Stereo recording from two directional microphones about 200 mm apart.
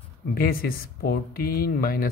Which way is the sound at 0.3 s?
45° left (ahead or behind).